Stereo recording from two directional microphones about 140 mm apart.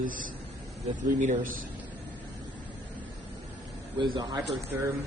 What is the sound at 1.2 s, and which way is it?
Speech, 70° right (ahead or behind).